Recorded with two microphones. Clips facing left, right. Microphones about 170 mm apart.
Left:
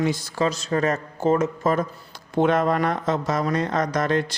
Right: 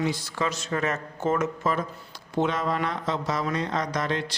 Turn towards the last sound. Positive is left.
turn(degrees=50)  # may be behind; listen again after turning